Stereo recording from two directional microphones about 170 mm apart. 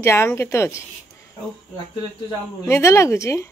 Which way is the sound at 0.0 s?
15° left (ahead or behind).